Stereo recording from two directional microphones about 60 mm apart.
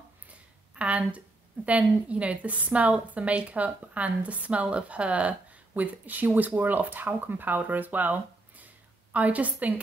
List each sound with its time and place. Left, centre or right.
0.7 s a woman's voice: right